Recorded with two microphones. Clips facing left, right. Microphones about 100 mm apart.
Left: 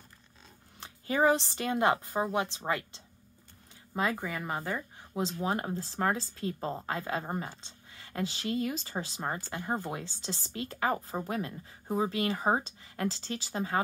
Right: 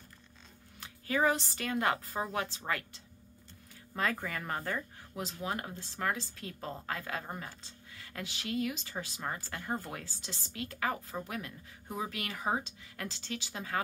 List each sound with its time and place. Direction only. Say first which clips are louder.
0.7 s speech: left 3 dB; 30° left (ahead or behind)
5.1 s speech: left 6 dB; 30° left (ahead or behind)